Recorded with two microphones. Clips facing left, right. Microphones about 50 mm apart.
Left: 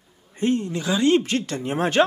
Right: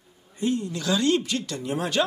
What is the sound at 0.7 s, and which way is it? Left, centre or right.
Speech, left.